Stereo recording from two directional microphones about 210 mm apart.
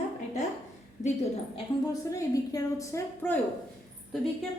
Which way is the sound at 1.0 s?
30° left (ahead or behind).